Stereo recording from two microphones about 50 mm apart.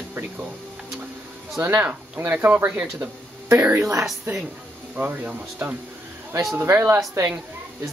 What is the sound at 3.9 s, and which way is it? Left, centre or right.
Speech, right.